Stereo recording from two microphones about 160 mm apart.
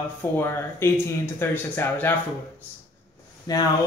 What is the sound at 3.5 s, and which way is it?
Speech, 25° left (ahead or behind).